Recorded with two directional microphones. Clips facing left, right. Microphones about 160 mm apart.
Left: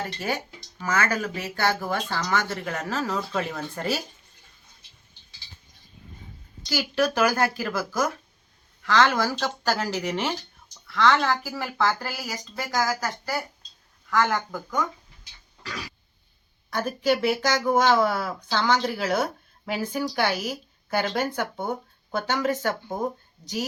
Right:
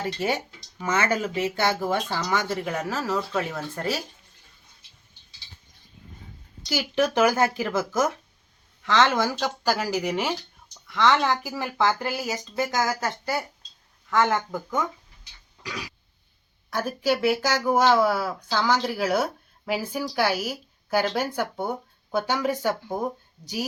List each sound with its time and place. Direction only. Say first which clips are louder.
0.0 s speech: right 3 dB; 20° right (ahead or behind); by 4.0 s centre (ahead or behind)
6.7 s speech: even; 20° right (ahead or behind)
10.8 s speech: even; 20° right (ahead or behind)
15.6 s a sound: right 1 dB; 10° right (ahead or behind)
16.6 s speech: left 1 dB; 5° right (ahead or behind)